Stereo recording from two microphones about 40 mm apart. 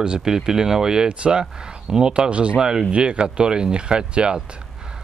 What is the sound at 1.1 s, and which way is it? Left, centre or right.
Speech, right.